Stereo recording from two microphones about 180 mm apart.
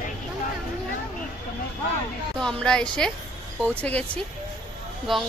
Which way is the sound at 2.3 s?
5° left (ahead or behind).